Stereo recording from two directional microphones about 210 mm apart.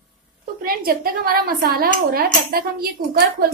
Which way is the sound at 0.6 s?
45° right (ahead or behind).